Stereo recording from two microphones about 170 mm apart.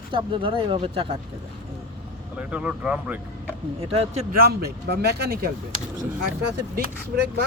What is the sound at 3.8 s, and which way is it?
Speech, 35° right (ahead or behind).